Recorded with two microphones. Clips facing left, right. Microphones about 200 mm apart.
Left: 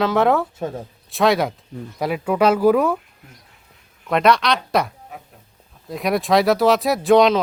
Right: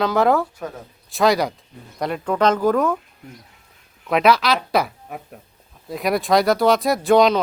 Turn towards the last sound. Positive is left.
turn(degrees=0)  # may be behind; listen again after turning